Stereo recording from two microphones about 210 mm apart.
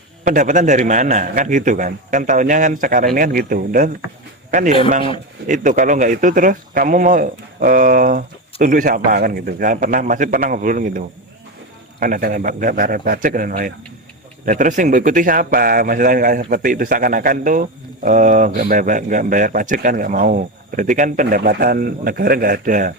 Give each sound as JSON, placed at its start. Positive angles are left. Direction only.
{"t": 0.3, "sound": "speech", "side_deg": -40}
{"t": 5.5, "sound": "speech", "side_deg": -40}